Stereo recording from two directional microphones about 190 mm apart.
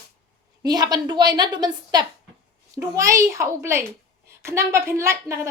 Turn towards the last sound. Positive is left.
turn(degrees=-15)  # may be behind; listen again after turning